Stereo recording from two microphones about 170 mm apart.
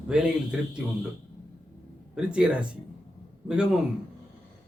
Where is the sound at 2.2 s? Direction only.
5° right (ahead or behind).